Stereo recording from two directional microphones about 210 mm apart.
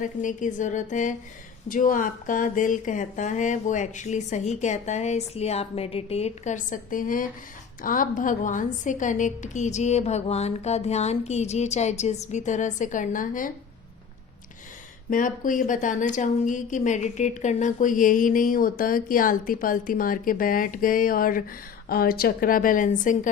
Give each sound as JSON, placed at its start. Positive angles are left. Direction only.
{"t": 0.0, "sound": "a woman's voice", "side_deg": 35}
{"t": 15.1, "sound": "a woman's voice", "side_deg": 40}